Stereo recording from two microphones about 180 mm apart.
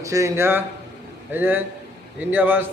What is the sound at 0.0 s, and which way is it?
Speech, 15° right (ahead or behind).